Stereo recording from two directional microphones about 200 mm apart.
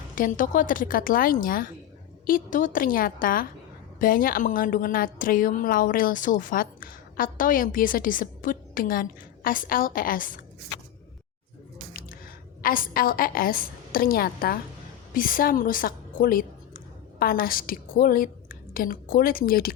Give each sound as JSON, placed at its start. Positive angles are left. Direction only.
{"t": 0.2, "sound": "a woman's voice", "side_deg": 40}
{"t": 12.6, "sound": "a woman's voice", "side_deg": 45}